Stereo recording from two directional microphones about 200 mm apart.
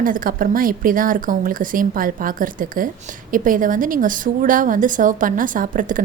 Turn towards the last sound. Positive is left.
turn(degrees=-40)  # may be behind; listen again after turning